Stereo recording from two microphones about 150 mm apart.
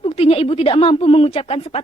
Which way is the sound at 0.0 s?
40° left (ahead or behind).